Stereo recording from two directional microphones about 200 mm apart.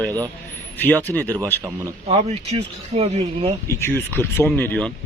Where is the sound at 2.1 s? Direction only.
30° right (ahead or behind).